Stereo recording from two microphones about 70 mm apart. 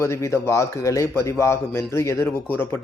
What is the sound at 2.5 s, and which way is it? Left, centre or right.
Speech, left.